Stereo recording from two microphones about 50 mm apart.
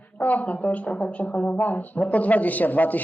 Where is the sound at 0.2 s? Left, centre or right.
Left.